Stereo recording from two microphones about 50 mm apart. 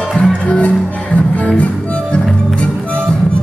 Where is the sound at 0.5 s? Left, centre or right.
Left.